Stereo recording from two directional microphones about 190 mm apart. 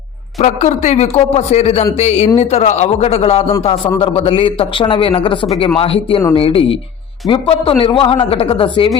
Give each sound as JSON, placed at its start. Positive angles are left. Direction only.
{"t": 0.3, "sound": "a man's voice", "side_deg": 35}